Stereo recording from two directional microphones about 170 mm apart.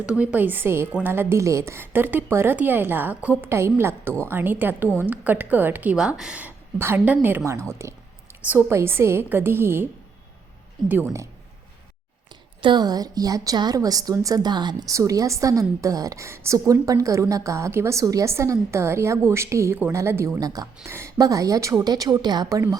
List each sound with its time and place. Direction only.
0.0 s a woman's voice: 5° right (ahead or behind)
10.8 s a woman's voice: 15° right (ahead or behind)
12.6 s a woman's voice: 25° right (ahead or behind)